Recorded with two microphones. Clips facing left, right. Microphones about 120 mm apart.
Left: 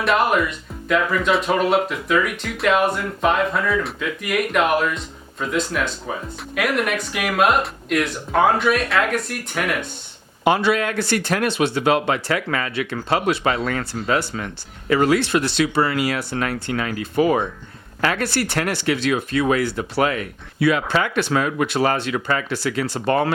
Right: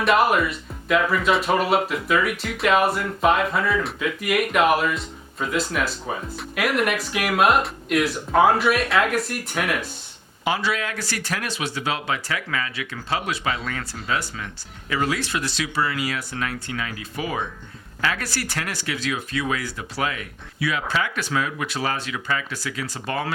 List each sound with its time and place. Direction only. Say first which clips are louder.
0.0 s speech: even; centre (ahead or behind)
10.4 s speech: left 6 dB; 60° left (ahead or behind)
14.3 s speech: left 6 dB; 40° left (ahead or behind)
15.1 s speech: left 8 dB; 65° left (ahead or behind); by 22.4 s 45° left (ahead or behind)
22.4 s speech: left 8 dB; 65° left (ahead or behind)